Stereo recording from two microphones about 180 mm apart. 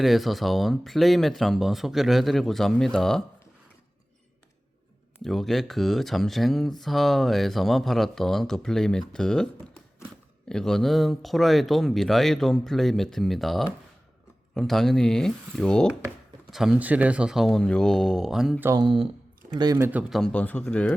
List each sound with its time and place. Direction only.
0.0 s speech: centre (ahead or behind)
5.2 s speech: centre (ahead or behind)
10.5 s speech: 5° left (ahead or behind)
18.6 s speech: 20° right (ahead or behind)
19.9 s speech: 5° right (ahead or behind)